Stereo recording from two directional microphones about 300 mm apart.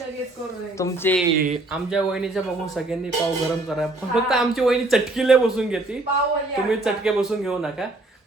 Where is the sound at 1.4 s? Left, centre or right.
Right.